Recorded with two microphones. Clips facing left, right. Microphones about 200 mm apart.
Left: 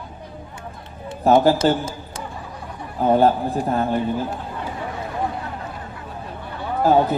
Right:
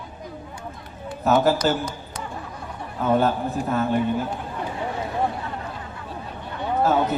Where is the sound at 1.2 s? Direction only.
30° left (ahead or behind).